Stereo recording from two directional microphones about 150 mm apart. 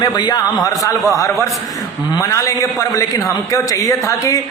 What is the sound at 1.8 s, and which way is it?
A man's voice, 20° left (ahead or behind).